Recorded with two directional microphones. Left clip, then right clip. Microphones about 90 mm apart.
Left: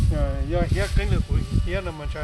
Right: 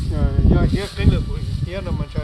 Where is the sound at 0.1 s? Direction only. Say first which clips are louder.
Right 5 dB; 30° left (ahead or behind).